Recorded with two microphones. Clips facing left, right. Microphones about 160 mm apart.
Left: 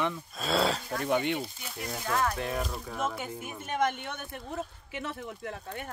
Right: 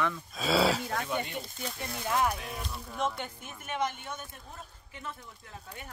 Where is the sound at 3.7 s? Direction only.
55° left (ahead or behind).